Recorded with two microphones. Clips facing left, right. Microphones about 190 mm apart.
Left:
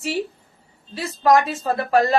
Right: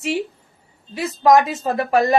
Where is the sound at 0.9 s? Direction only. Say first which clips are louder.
Right 3 dB; 15° right (ahead or behind).